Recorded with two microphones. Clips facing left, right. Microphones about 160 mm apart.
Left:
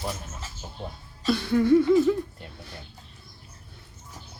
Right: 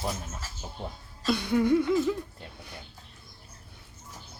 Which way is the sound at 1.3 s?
15° right (ahead or behind).